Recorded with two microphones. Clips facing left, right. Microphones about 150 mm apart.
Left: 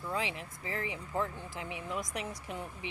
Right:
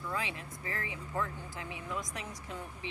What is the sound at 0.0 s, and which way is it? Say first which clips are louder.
Speech: left 2 dB; 20° left (ahead or behind).